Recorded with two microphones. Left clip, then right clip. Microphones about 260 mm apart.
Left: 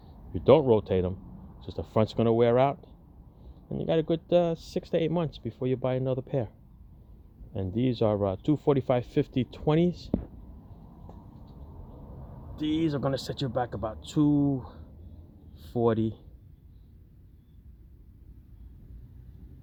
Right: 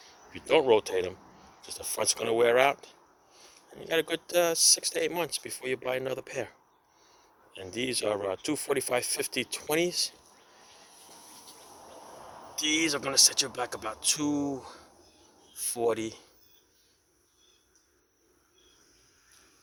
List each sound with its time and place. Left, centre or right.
0.3 s speech: centre
3.9 s speech: centre
7.6 s speech: centre
12.5 s speech: centre
14.3 s speech: right
16.0 s speech: centre